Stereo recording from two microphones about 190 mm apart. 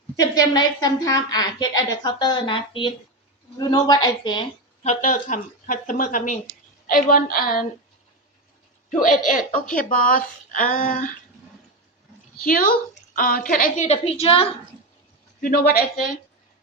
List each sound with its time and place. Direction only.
0.2 s a woman's voice: 20° left (ahead or behind)
4.8 s a woman's voice: 40° left (ahead or behind)
8.9 s a woman's voice: 45° left (ahead or behind)
12.4 s a woman's voice: 50° left (ahead or behind); by 14.5 s 30° left (ahead or behind)
15.4 s a woman's voice: 50° left (ahead or behind)